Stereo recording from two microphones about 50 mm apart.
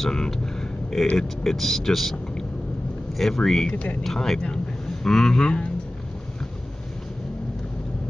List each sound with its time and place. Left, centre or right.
0.0 s speech: centre
3.7 s speech: left
4.0 s speech: centre